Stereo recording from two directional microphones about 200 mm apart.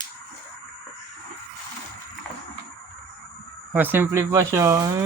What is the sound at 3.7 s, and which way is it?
Speech, 10° right (ahead or behind).